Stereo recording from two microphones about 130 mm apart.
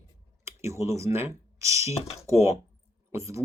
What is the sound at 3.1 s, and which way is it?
Speech, 20° right (ahead or behind).